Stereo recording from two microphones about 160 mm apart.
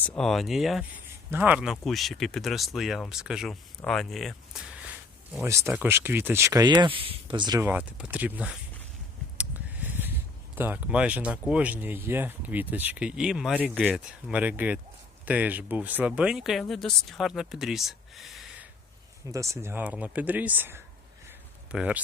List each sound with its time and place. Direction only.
0.0 s speech: 5° left (ahead or behind)
5.4 s speech: 15° right (ahead or behind)
7.6 s speech: 10° right (ahead or behind)
19.3 s speech: 20° right (ahead or behind)
21.2 s a sound: 5° right (ahead or behind)